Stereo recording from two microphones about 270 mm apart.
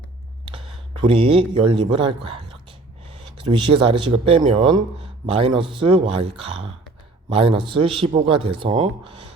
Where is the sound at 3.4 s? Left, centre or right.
Centre.